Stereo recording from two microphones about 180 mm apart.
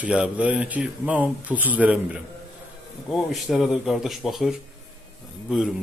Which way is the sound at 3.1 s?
Centre (ahead or behind).